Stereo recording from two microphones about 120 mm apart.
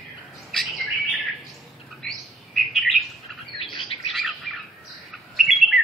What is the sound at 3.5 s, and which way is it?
Bird, 50° left (ahead or behind).